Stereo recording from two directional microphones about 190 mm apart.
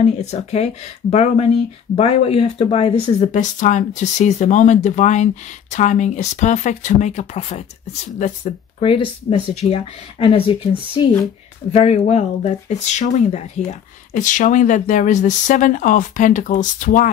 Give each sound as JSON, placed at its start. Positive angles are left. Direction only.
{"t": 0.0, "sound": "speech", "side_deg": 35}